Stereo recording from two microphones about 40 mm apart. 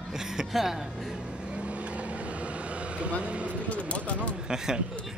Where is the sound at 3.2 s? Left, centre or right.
Right.